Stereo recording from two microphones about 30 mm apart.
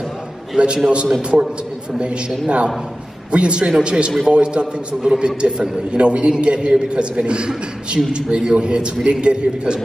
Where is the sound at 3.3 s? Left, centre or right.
Right.